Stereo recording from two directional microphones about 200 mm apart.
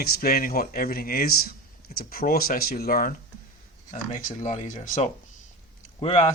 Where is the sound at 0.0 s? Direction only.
50° left (ahead or behind).